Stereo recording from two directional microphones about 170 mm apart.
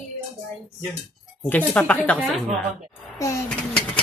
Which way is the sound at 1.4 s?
10° left (ahead or behind).